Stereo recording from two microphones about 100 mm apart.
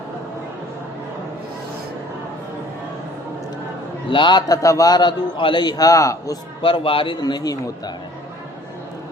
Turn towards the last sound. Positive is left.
turn(degrees=40)  # may be behind; listen again after turning